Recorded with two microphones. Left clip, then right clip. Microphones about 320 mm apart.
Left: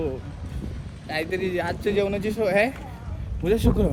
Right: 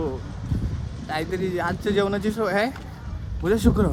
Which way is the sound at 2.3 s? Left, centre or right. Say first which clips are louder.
Left 4 dB; right.